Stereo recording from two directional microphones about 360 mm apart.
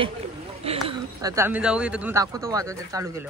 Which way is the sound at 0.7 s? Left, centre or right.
Centre.